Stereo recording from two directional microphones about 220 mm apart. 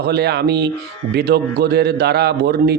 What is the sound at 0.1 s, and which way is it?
A man's voice, 50° right (ahead or behind).